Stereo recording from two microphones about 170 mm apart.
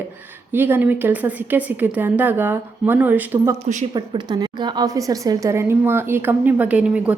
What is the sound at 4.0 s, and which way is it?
A woman's voice, 25° right (ahead or behind).